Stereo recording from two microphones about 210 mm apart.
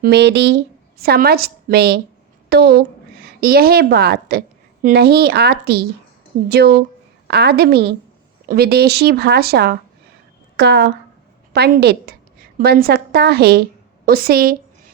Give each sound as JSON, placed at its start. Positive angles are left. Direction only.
{"t": 0.0, "sound": "a woman's voice", "side_deg": -55}